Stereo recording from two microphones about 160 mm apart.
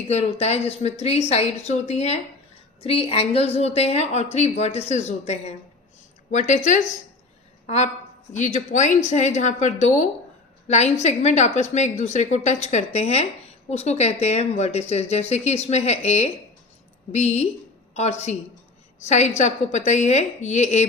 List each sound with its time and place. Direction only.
0.1 s a woman's voice: 40° left (ahead or behind)
7.7 s a woman's voice: 40° left (ahead or behind)